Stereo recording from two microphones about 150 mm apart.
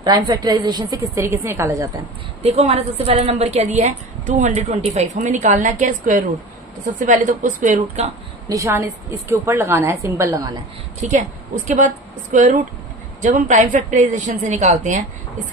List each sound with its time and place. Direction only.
0.0 s a woman's voice: 30° right (ahead or behind)
2.4 s a woman's voice: 45° right (ahead or behind)
8.5 s a woman's voice: 20° right (ahead or behind)
11.0 s a woman's voice: 55° right (ahead or behind)